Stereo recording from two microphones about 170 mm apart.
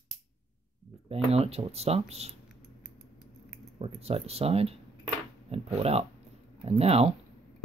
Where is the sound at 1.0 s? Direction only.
35° right (ahead or behind).